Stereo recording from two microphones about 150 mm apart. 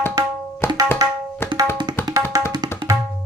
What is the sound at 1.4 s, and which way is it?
Tabla, 15° left (ahead or behind).